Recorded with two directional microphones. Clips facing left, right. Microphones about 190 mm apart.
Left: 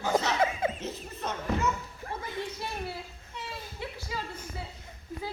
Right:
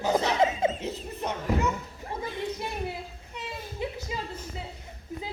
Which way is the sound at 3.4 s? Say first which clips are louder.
Right 5 dB; 20° right (ahead or behind).